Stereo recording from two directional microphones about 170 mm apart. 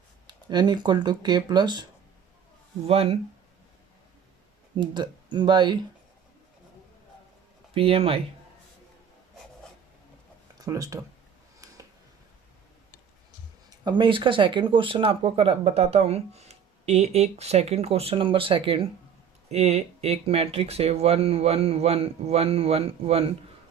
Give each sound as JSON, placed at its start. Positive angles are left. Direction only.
{"t": 0.3, "sound": "speech", "side_deg": -25}
{"t": 4.8, "sound": "speech", "side_deg": -25}
{"t": 7.7, "sound": "speech", "side_deg": -35}
{"t": 10.6, "sound": "speech", "side_deg": -20}
{"t": 11.6, "sound": "a sound", "side_deg": -20}
{"t": 13.7, "sound": "speech", "side_deg": -25}